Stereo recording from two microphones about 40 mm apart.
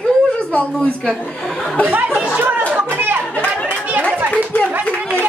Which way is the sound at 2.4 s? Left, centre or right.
Right.